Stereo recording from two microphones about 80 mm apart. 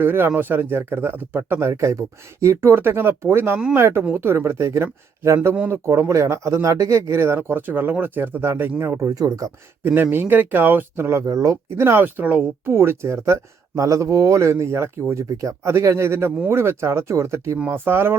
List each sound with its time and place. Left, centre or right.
0.0 s speech: right
9.0 s speech: right
9.8 s speech: right
11.3 s speech: right
11.8 s speech: right
12.6 s speech: right